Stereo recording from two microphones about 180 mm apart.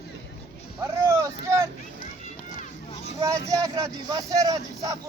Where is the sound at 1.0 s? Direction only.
15° right (ahead or behind).